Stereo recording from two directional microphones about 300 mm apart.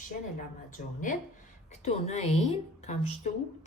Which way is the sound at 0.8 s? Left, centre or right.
Left.